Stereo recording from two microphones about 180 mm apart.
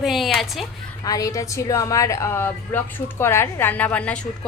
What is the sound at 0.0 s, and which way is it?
Speech, centre (ahead or behind).